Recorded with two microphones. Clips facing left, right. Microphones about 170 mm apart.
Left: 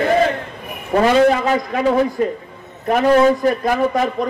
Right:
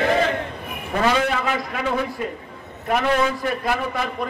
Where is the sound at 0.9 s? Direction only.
40° left (ahead or behind).